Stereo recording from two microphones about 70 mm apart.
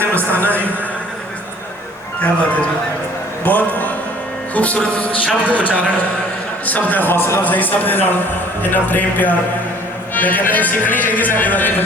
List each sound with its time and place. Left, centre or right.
2.2 s a man's voice: centre
7.4 s speech: left